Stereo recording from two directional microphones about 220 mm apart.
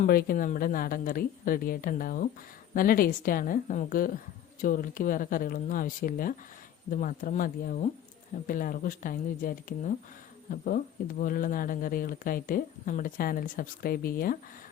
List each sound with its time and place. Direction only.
0.0 s speech: 40° left (ahead or behind)